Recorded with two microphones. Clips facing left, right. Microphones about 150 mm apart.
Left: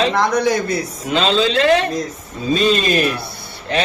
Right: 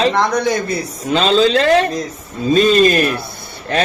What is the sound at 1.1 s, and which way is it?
Speech, 40° right (ahead or behind).